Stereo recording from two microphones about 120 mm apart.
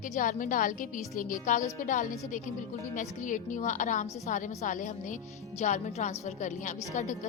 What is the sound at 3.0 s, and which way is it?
A woman's voice, 90° left.